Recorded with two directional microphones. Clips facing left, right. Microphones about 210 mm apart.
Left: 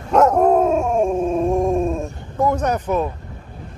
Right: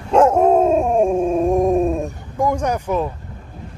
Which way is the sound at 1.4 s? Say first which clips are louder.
Right 3 dB; 15° right (ahead or behind).